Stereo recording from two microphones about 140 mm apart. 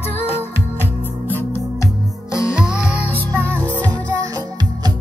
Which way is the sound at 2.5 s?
5° right (ahead or behind).